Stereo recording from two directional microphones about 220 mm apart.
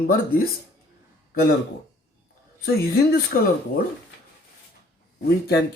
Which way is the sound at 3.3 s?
40° left (ahead or behind).